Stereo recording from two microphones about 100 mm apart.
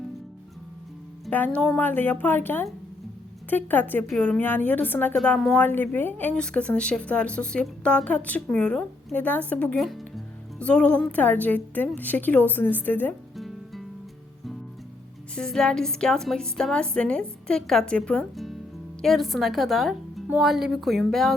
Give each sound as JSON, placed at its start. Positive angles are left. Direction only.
{"t": 1.3, "sound": "a woman's voice", "side_deg": 15}
{"t": 13.3, "sound": "music", "side_deg": 0}
{"t": 15.4, "sound": "a woman's voice", "side_deg": 5}
{"t": 19.0, "sound": "a woman's voice", "side_deg": 0}